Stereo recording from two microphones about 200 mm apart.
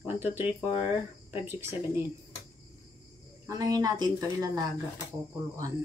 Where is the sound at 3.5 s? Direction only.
20° right (ahead or behind).